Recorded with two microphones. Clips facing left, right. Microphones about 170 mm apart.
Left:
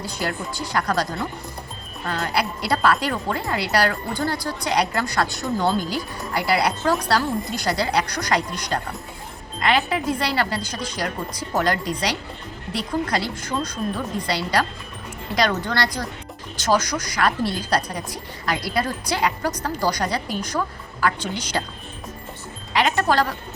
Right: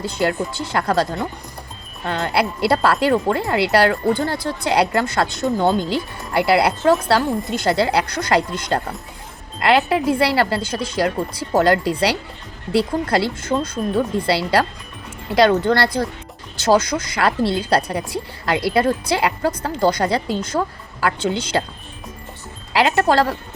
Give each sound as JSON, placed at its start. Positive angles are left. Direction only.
{"t": 0.0, "sound": "speech", "side_deg": -25}
{"t": 2.0, "sound": "speech", "side_deg": -25}
{"t": 10.1, "sound": "speech", "side_deg": -30}
{"t": 22.7, "sound": "speech", "side_deg": -30}